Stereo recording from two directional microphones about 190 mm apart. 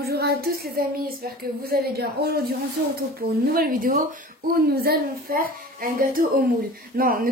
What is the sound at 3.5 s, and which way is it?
Speech, 50° right (ahead or behind).